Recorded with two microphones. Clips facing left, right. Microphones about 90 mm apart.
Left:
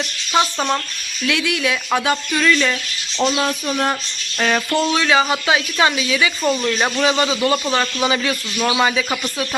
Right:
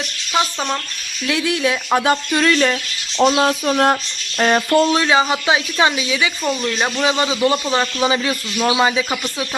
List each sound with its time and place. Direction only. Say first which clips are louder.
0.3 s speech: left 2 dB; 10° left (ahead or behind)
1.3 s speech: right 2 dB; 35° right (ahead or behind)
2.3 s speech: left 1 dB; 45° right (ahead or behind)
3.4 s speech: right 4 dB; 55° right (ahead or behind)
4.4 s speech: right 4 dB; 35° right (ahead or behind)
5.0 s a man's voice: right 1 dB; 20° right (ahead or behind)
6.4 s speech: left 1 dB; 5° left (ahead or behind)
7.0 s a man's voice: right 1 dB; 20° right (ahead or behind)
8.5 s speech: right 2 dB; 10° right (ahead or behind)